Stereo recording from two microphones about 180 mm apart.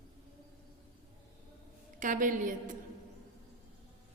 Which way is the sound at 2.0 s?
45° right (ahead or behind).